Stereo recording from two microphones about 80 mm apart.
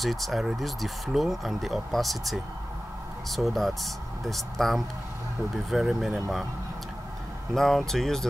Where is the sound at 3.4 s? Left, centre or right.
Centre.